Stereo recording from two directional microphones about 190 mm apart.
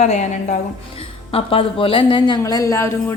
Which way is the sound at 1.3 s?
30° left (ahead or behind).